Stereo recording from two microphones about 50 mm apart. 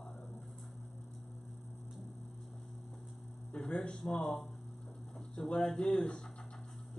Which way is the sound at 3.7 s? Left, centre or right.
Centre.